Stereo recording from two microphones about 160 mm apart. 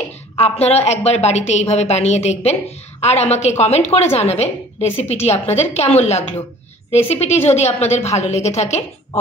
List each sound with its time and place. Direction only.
0.4 s a woman's voice: 40° left (ahead or behind)